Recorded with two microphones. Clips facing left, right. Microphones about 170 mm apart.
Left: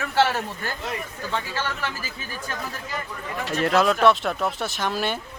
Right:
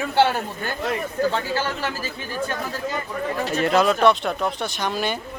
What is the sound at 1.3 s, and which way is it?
Speech, 30° right (ahead or behind).